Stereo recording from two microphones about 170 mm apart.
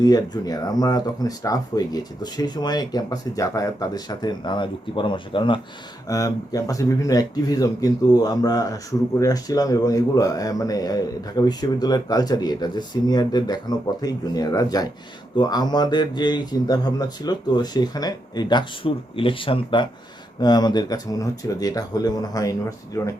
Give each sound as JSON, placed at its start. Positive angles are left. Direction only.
{"t": 0.0, "sound": "speech", "side_deg": 20}